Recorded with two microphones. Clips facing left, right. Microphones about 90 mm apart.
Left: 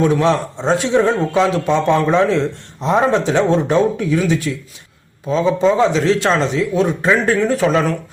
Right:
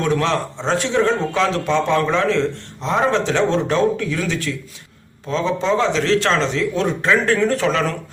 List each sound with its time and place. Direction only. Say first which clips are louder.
0.0 s a man's voice: left 4 dB; 15° left (ahead or behind)